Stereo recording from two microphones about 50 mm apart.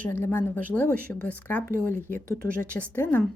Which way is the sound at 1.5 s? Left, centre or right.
Left.